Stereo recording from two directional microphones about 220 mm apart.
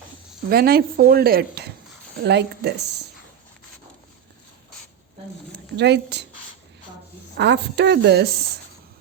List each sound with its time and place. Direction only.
0.5 s speech: 45° right (ahead or behind)
5.7 s speech: 50° right (ahead or behind)
7.3 s speech: 50° right (ahead or behind)